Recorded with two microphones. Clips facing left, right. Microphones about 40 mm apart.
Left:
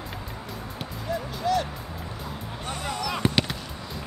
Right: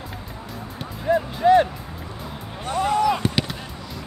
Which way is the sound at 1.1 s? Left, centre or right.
Right.